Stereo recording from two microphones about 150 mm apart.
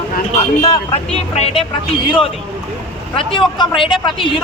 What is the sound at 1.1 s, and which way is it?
A man's voice, 40° left (ahead or behind).